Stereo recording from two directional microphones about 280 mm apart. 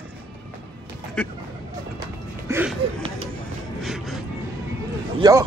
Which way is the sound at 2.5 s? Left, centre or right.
Centre.